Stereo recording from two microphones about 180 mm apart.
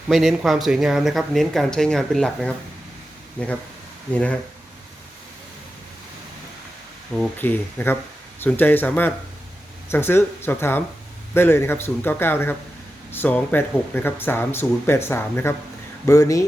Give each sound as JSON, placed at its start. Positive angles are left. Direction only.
{"t": 0.1, "sound": "speech", "side_deg": 0}
{"t": 7.2, "sound": "speech", "side_deg": 10}